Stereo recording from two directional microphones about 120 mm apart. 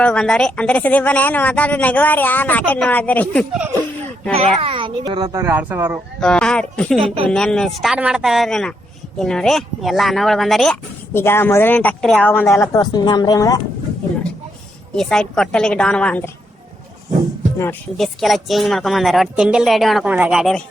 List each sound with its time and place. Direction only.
0.0 s speech: 10° left (ahead or behind)
4.4 s a child's voice: 50° right (ahead or behind)
5.3 s speech: 20° right (ahead or behind)
6.1 s speech: 5° left (ahead or behind)
11.1 s speech: 20° left (ahead or behind)
12.5 s speech: 25° left (ahead or behind)
14.9 s speech: 5° left (ahead or behind)
17.9 s speech: centre (ahead or behind)
20.1 s speech: 15° right (ahead or behind)
20.3 s speech: centre (ahead or behind)